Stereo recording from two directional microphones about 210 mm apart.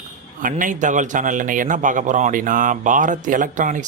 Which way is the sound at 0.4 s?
40° right (ahead or behind).